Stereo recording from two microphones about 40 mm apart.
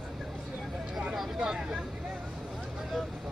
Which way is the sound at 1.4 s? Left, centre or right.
Centre.